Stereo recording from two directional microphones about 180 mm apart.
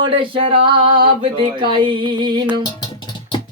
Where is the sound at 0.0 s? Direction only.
30° right (ahead or behind).